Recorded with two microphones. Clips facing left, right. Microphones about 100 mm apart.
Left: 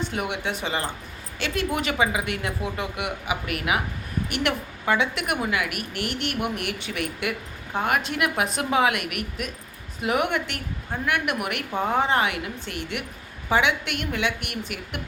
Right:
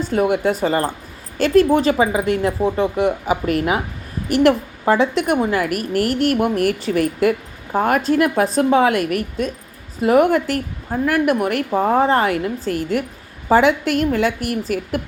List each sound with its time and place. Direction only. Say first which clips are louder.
0.1 s a woman's voice: right 11 dB; 40° right (ahead or behind)